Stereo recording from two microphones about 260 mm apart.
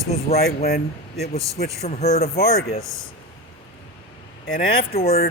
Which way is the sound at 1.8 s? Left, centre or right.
Left.